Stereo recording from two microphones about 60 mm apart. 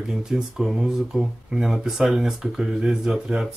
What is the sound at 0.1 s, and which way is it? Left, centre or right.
Speech, centre.